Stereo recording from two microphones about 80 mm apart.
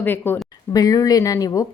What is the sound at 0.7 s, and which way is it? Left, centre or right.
Speech, left.